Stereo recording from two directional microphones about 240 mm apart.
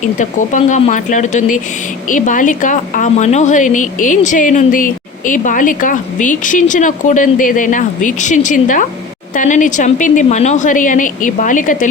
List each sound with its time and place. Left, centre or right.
0.2 s a woman's voice: left